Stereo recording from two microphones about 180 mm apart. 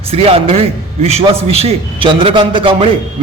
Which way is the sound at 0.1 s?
35° right (ahead or behind).